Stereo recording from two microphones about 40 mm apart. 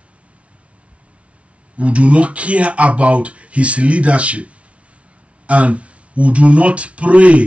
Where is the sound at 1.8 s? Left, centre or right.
Right.